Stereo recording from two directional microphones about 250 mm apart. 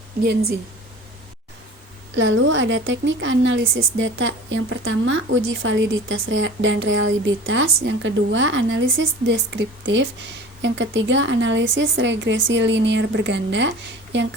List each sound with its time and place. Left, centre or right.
2.1 s a woman's voice: right